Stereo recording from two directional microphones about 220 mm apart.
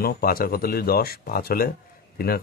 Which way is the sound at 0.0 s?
45° left (ahead or behind).